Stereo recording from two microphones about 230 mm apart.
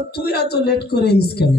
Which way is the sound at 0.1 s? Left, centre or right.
Left.